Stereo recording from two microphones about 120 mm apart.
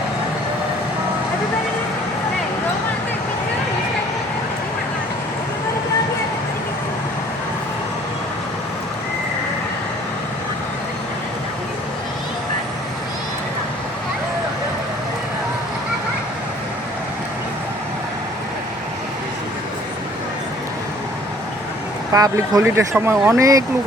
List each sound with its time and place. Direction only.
22.1 s speech: 30° right (ahead or behind)